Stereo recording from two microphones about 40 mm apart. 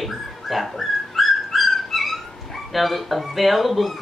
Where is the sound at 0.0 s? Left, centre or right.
Centre.